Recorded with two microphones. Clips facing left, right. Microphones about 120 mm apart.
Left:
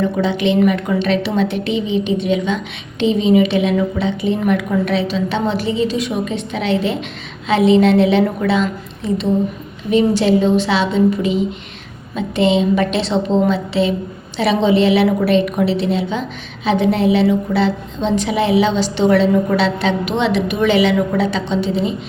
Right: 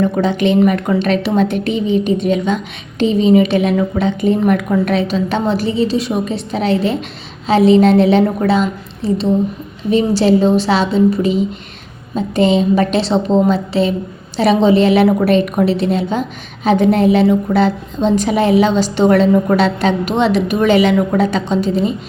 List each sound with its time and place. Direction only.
0.2 s a woman's voice: 45° right (ahead or behind)